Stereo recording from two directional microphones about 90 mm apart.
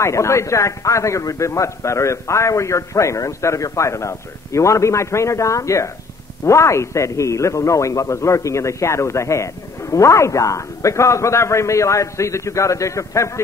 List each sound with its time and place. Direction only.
0.0 s a man's voice: 35° left (ahead or behind)